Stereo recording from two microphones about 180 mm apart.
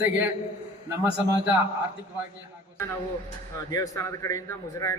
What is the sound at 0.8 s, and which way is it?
Speech, 10° right (ahead or behind).